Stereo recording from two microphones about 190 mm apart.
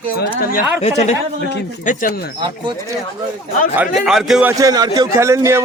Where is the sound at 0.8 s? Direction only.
35° left (ahead or behind).